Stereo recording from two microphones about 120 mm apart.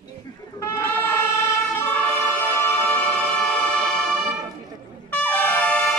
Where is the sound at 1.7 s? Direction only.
15° left (ahead or behind).